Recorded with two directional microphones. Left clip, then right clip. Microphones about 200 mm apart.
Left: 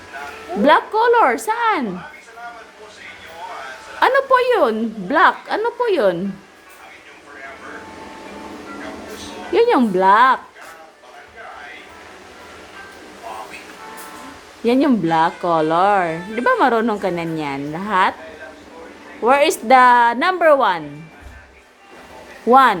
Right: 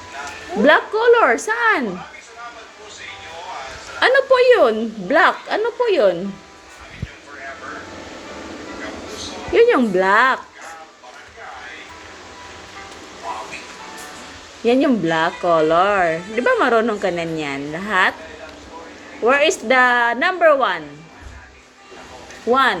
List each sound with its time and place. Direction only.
0.6 s a woman's voice: 20° left (ahead or behind)
4.0 s speech: 20° left (ahead or behind)
9.5 s speech: 20° left (ahead or behind)
14.6 s speech: 20° left (ahead or behind)
19.2 s speech: 25° left (ahead or behind)
22.5 s speech: 30° left (ahead or behind)